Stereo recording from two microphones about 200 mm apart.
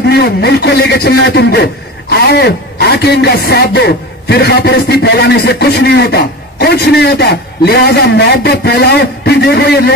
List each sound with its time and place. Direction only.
0.1 s a man's voice: 55° left (ahead or behind)